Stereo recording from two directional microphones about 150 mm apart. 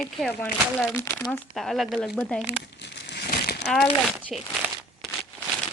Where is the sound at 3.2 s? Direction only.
90° left.